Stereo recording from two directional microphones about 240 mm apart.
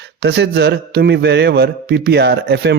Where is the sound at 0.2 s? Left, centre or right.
Right.